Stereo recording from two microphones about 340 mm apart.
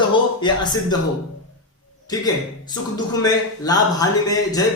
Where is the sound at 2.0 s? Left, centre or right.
Centre.